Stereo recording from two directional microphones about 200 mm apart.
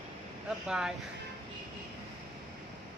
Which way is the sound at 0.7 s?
5° right (ahead or behind).